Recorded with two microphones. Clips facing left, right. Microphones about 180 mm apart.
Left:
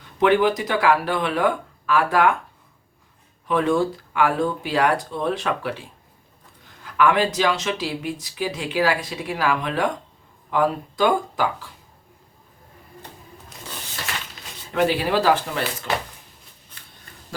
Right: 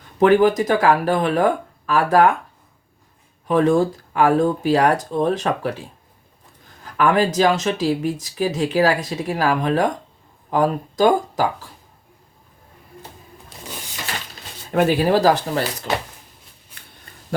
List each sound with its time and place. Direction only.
0.2 s speech: 45° right (ahead or behind)
3.4 s speech: 40° right (ahead or behind)
6.8 s speech: 40° right (ahead or behind)
14.7 s speech: 45° right (ahead or behind)
16.7 s shuffling cards: 10° right (ahead or behind)